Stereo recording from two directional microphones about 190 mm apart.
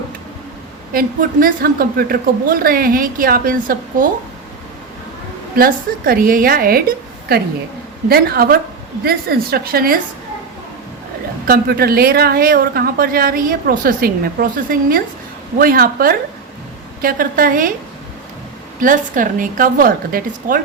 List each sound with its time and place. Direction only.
0.9 s speech: 45° right (ahead or behind)
5.5 s speech: 50° right (ahead or behind)
11.4 s speech: 55° right (ahead or behind)
18.8 s speech: 45° right (ahead or behind)